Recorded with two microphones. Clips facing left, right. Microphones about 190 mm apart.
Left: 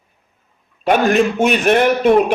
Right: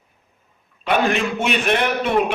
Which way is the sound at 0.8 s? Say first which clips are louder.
Left 6 dB; 45° left (ahead or behind).